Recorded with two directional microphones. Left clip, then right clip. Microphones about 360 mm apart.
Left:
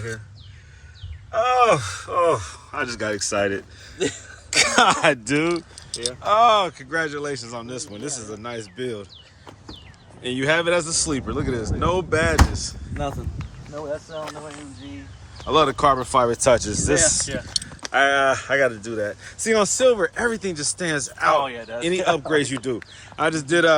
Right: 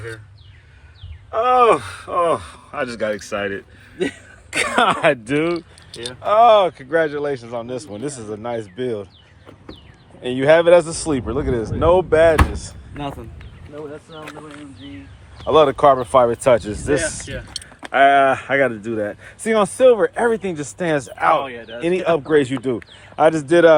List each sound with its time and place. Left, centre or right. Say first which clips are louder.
1.3 s speech: right 3 dB; centre
4.6 s speech: right 1 dB; centre
5.9 s speech: right 2 dB; centre
10.2 s speech: right 8 dB; centre
14.1 s speech: left 3 dB; left
15.4 s speech: right 5 dB; centre
17.0 s speech: left 4 dB; left
17.9 s speech: right 5 dB; centre
21.4 s speech: left 1 dB; left
21.8 s speech: right 3 dB; centre